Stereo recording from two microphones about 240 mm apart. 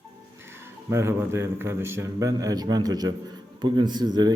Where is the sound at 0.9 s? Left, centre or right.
Centre.